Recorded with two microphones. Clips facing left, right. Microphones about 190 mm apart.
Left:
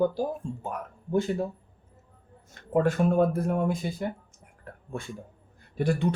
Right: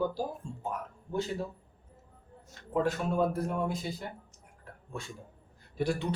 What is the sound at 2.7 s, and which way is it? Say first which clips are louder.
Speech: left 6 dB; 55° left (ahead or behind).